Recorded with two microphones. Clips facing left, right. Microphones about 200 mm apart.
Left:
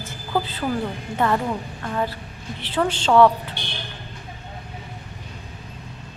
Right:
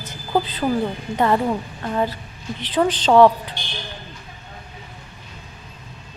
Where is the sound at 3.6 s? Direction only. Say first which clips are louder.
Left 1 dB; 65° left (ahead or behind).